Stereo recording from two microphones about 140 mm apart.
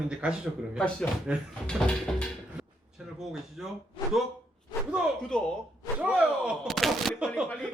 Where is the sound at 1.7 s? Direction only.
5° left (ahead or behind).